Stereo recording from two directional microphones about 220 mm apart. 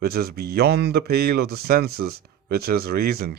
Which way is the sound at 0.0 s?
45° right (ahead or behind).